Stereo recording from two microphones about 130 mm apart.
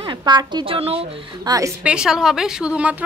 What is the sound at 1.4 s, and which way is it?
Speech, 30° right (ahead or behind).